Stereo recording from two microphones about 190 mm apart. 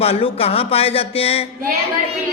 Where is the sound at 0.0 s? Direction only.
30° left (ahead or behind).